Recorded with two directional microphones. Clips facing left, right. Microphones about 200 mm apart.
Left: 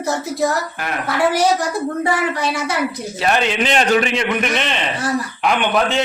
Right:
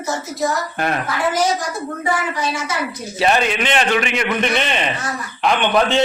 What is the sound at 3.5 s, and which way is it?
Speech, 35° left (ahead or behind).